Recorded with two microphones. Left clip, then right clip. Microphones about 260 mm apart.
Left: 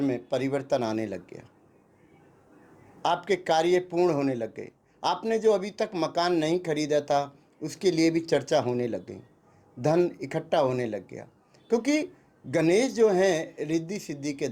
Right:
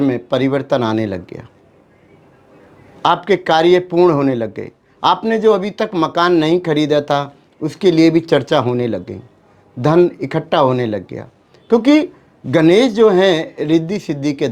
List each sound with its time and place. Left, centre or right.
0.0 s speech: right
3.0 s a man's voice: right